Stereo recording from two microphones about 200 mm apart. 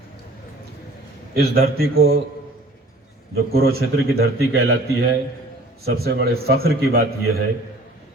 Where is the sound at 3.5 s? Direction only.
50° right (ahead or behind).